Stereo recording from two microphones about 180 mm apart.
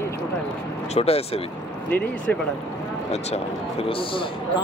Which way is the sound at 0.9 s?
35° left (ahead or behind).